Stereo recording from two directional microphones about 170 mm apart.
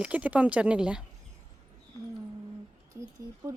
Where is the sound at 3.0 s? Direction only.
15° right (ahead or behind).